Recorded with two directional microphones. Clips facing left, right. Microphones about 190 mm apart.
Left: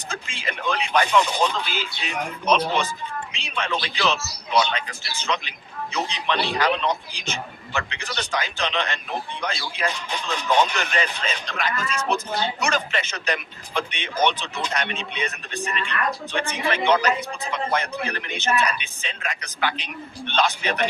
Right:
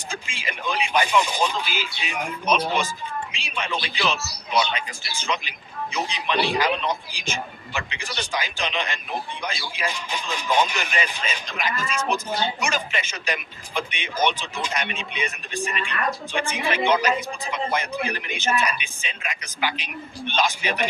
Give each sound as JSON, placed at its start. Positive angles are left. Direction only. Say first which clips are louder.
{"t": 0.1, "sound": "speech", "louder": "left 2 dB", "side_deg": -10}